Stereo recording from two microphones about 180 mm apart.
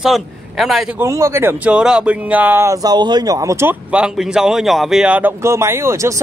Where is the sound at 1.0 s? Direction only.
15° right (ahead or behind).